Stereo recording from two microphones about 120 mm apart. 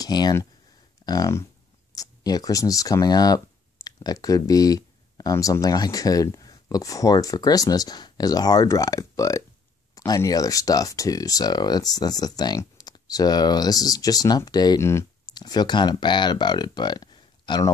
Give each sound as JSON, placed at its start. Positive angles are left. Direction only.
{"t": 0.0, "sound": "speech", "side_deg": 35}
{"t": 14.8, "sound": "speech", "side_deg": 20}
{"t": 15.3, "sound": "speech", "side_deg": 35}